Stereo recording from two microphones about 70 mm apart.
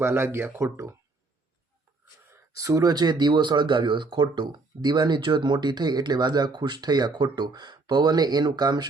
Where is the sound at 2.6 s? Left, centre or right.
Right.